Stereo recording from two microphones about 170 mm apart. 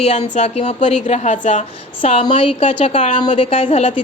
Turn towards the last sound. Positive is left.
turn(degrees=30)  # may be behind; listen again after turning